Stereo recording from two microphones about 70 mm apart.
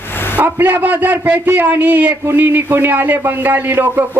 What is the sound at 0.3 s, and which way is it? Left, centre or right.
A man's voice, right.